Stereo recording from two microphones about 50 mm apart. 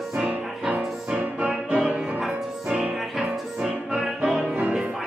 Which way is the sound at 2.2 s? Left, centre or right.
Centre.